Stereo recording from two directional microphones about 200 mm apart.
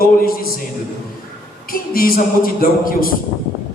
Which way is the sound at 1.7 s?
50° left (ahead or behind).